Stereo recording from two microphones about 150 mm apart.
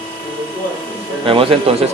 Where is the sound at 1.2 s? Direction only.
35° right (ahead or behind).